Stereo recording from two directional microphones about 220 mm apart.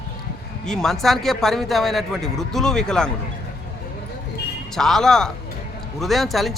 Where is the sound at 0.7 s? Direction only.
Centre (ahead or behind).